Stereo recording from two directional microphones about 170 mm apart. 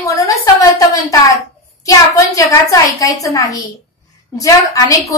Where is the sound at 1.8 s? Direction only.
20° left (ahead or behind).